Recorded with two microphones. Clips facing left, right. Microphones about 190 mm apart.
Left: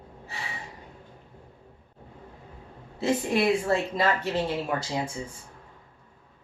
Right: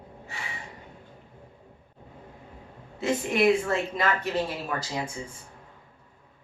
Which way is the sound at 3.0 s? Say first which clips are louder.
Even; 30° left (ahead or behind).